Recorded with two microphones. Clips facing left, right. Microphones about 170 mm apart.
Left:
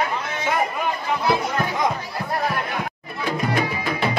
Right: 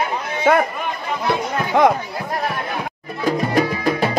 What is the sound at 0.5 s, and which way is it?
Speech, 55° right (ahead or behind).